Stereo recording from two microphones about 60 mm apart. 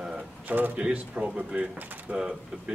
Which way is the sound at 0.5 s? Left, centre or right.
Right.